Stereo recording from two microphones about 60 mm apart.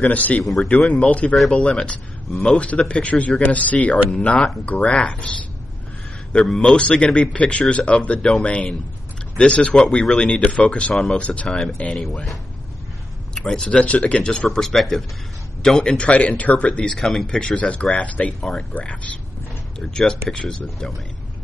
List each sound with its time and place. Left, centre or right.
0.0 s speech: left
0.4 s a man's voice: centre
0.8 s speech: centre
6.5 s speech: centre
7.2 s speech: centre
13.3 s speech: centre
13.7 s speech: centre
14.6 s a man's voice: centre
16.9 s speech: centre; by 19.1 s left
19.8 s speech: centre